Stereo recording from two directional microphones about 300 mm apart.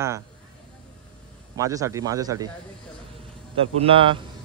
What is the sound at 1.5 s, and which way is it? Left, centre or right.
Speech, centre.